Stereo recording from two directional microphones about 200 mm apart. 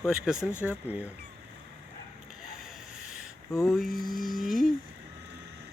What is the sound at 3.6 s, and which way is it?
Speech, centre (ahead or behind).